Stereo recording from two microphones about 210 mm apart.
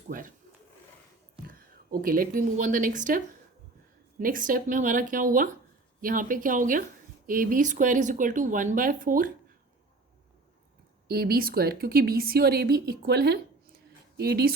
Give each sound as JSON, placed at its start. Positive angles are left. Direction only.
{"t": 0.1, "sound": "speech", "side_deg": -40}
{"t": 1.5, "sound": "a woman's voice", "side_deg": -45}
{"t": 4.2, "sound": "speech", "side_deg": -40}
{"t": 11.1, "sound": "a woman's voice", "side_deg": -45}